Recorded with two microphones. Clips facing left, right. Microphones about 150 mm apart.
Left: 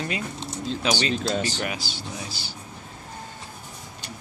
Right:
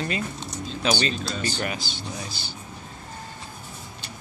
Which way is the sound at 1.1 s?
85° left.